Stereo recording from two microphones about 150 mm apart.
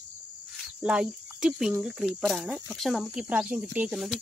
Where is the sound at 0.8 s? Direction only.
5° right (ahead or behind).